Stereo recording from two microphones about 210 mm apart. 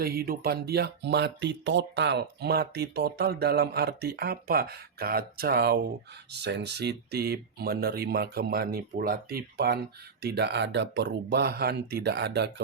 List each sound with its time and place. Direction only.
0.0 s speech: 45° right (ahead or behind)